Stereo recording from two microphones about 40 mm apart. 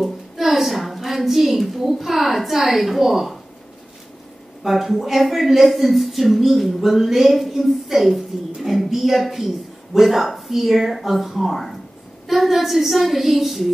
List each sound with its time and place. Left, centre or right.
0.0 s a woman's voice: centre
4.6 s a woman's voice: centre